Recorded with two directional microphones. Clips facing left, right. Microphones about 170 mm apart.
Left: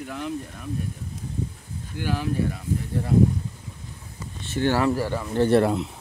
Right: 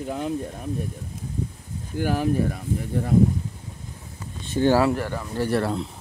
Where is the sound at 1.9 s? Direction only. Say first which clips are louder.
Right 4 dB; 45° right (ahead or behind).